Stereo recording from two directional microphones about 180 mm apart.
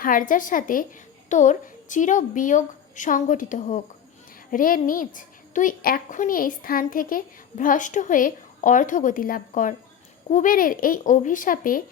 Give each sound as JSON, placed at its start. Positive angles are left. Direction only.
{"t": 0.0, "sound": "a woman's voice", "side_deg": 50}